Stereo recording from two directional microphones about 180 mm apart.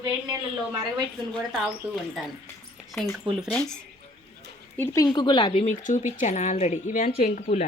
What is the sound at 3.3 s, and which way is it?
Speech, 5° left (ahead or behind).